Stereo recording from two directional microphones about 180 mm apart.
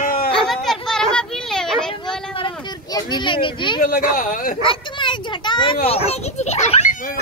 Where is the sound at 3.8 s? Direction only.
50° left (ahead or behind).